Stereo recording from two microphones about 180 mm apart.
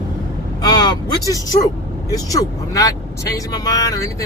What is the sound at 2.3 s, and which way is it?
Speech, 20° left (ahead or behind).